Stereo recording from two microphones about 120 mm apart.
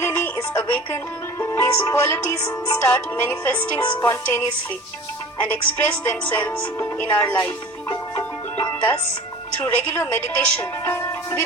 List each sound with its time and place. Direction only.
0.0 s music: 20° left (ahead or behind)
1.4 s speech: 20° left (ahead or behind)
7.9 s music: 15° left (ahead or behind)
9.6 s speech: 15° left (ahead or behind)